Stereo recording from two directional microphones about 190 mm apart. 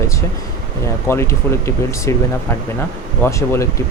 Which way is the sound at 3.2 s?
15° left (ahead or behind).